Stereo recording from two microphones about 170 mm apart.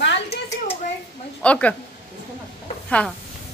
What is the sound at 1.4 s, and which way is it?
Speech, 5° left (ahead or behind).